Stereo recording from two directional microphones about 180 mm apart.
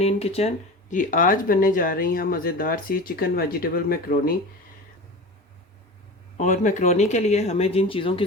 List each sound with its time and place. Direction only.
0.0 s speech: 35° left (ahead or behind); by 4.4 s 55° left (ahead or behind)
6.3 s speech: 45° left (ahead or behind)